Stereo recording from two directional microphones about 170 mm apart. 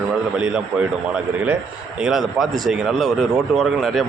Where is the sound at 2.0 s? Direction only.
Centre (ahead or behind).